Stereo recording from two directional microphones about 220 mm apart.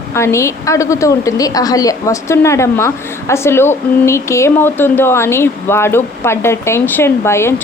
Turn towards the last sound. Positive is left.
turn(degrees=10)  # may be behind; listen again after turning